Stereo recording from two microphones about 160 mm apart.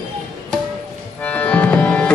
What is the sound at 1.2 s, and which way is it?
Tabla, 10° left (ahead or behind).